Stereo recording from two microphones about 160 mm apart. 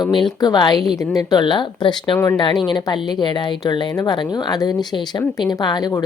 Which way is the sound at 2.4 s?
30° left (ahead or behind).